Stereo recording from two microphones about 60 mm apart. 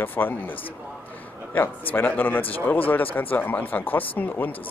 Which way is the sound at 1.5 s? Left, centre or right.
Left.